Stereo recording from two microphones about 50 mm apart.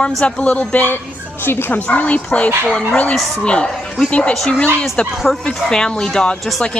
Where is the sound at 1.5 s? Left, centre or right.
Left.